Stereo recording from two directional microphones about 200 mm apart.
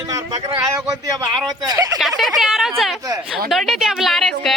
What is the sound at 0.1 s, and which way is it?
Speech, 20° right (ahead or behind).